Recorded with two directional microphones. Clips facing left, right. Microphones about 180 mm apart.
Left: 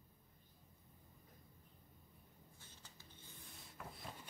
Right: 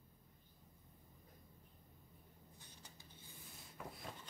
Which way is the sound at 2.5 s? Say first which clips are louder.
Right 3 dB; 15° right (ahead or behind).